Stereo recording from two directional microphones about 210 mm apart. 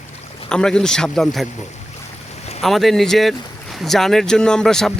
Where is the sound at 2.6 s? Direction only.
Centre (ahead or behind).